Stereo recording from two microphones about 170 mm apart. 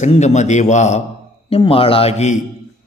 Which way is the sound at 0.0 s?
40° left (ahead or behind).